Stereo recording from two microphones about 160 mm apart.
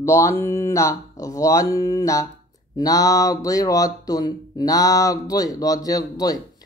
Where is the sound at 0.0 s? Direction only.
15° left (ahead or behind).